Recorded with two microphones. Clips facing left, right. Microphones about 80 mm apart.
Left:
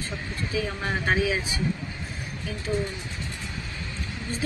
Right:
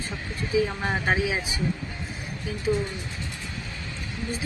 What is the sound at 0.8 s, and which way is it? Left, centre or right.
Speech, centre.